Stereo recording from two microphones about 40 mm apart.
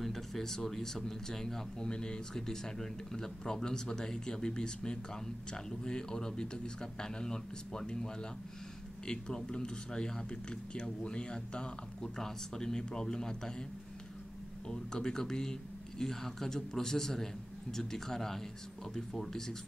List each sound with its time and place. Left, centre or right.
0.0 s speech: centre
14.7 s speech: centre